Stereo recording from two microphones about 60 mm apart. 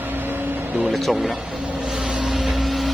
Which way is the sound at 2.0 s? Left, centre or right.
Centre.